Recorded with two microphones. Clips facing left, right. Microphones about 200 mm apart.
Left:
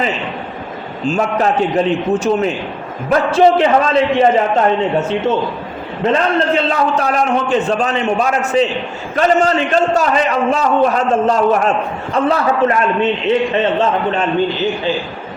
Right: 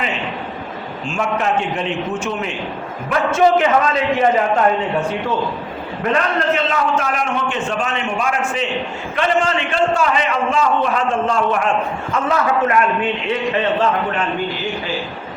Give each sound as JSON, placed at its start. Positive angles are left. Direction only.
{"t": 1.0, "sound": "a man's voice", "side_deg": 40}